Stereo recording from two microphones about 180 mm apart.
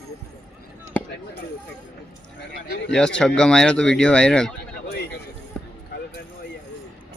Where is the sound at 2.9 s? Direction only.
5° left (ahead or behind).